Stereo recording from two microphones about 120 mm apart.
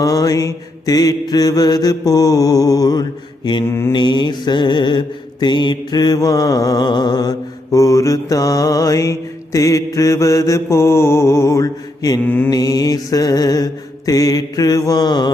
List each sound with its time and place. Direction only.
0.0 s mantra: 30° left (ahead or behind)
3.7 s mantra: 20° left (ahead or behind)
3.9 s mantra: 40° left (ahead or behind)
12.2 s mantra: 15° left (ahead or behind)
12.5 s mantra: 30° left (ahead or behind)